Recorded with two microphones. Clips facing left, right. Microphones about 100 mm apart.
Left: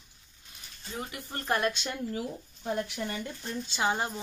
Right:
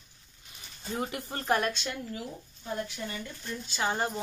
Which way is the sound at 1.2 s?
15° right (ahead or behind).